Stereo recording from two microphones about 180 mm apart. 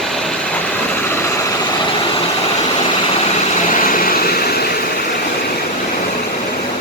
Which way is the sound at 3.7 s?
50° left (ahead or behind).